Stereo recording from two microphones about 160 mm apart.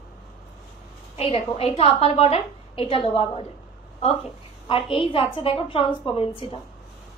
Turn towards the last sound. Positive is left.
turn(degrees=30)  # may be behind; listen again after turning